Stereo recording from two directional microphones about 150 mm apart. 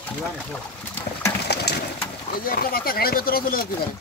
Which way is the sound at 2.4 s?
85° left.